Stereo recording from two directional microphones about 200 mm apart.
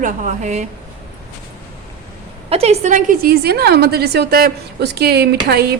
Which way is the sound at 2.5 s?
30° right (ahead or behind).